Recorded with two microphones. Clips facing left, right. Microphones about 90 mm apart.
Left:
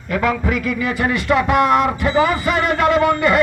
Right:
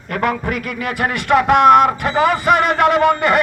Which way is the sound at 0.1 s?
50° right (ahead or behind).